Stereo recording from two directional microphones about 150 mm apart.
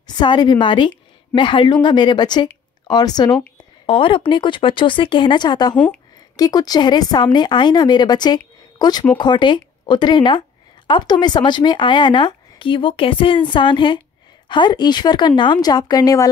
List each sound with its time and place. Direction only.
0.1 s a woman's voice: 30° left (ahead or behind)
3.8 s speech: 35° left (ahead or behind)